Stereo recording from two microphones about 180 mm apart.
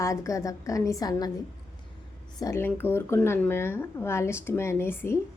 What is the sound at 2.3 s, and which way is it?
Speech, 15° left (ahead or behind).